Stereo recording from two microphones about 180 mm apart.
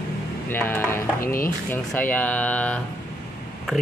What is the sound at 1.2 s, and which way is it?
Speech, 50° left (ahead or behind).